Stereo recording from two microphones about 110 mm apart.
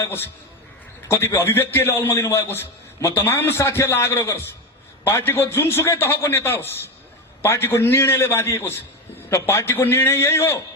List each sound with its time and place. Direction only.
0.0 s a man's voice: 20° left (ahead or behind)